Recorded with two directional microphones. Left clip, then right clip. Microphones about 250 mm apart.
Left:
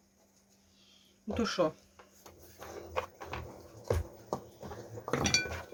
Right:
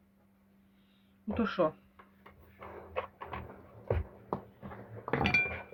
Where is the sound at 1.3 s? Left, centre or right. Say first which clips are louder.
Even; centre.